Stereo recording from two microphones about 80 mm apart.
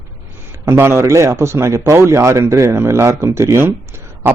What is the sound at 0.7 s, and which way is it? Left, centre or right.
Speech, right.